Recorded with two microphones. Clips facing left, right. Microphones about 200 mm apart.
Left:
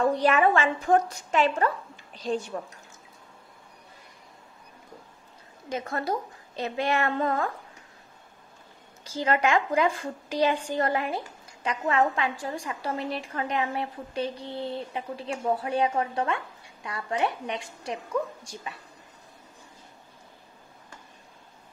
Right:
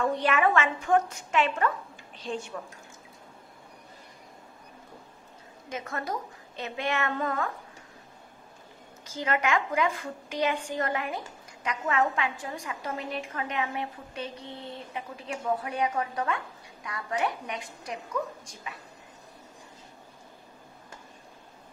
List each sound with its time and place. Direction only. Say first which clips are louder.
0.0 s a woman's voice: left 3 dB; 35° left (ahead or behind)
5.7 s a woman's voice: left 4 dB; 35° left (ahead or behind)
9.0 s a woman's voice: left 4 dB; 35° left (ahead or behind)